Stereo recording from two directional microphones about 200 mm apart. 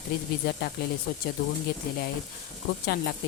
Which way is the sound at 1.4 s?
45° left (ahead or behind).